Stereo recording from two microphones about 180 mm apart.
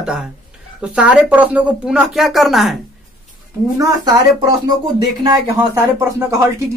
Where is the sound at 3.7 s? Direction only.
20° right (ahead or behind).